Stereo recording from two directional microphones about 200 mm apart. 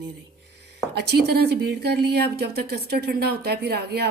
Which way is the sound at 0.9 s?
55° right (ahead or behind).